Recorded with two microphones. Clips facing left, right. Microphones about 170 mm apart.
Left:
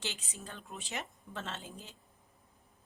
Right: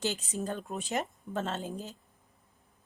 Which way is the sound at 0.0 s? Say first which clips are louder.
Right 11 dB; 45° right (ahead or behind).